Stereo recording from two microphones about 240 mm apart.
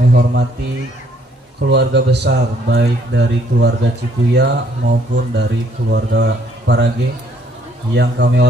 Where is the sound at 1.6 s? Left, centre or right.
Right.